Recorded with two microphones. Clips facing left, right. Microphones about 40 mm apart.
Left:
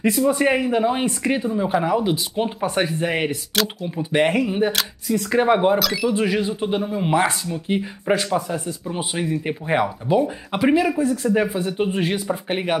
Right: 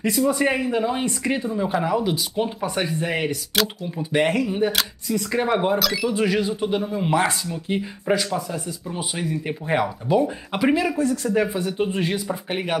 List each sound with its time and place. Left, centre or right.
0.1 s speech: centre
3.5 s speech: centre
5.8 s speech: centre
11.1 s speech: left